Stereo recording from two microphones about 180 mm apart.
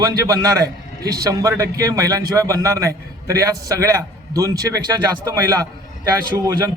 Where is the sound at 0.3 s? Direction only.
20° right (ahead or behind).